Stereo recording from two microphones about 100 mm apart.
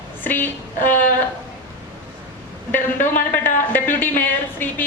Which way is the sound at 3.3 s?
20° left (ahead or behind).